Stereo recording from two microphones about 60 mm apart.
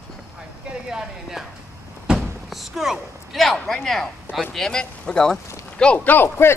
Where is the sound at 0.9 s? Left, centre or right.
Centre.